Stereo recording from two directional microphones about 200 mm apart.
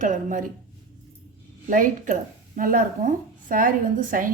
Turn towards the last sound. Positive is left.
turn(degrees=-40)  # may be behind; listen again after turning